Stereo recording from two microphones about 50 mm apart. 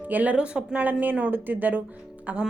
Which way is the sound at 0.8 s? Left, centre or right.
Right.